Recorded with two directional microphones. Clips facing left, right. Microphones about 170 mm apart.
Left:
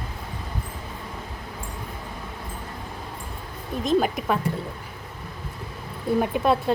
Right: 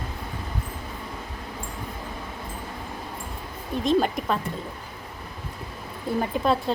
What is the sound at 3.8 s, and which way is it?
Speech, 5° left (ahead or behind).